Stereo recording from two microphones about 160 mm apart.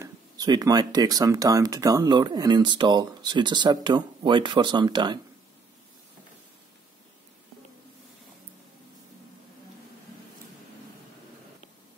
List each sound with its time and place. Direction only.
0.0 s speech: 25° right (ahead or behind)